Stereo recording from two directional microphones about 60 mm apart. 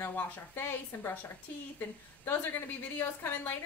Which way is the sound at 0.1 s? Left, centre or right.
Left.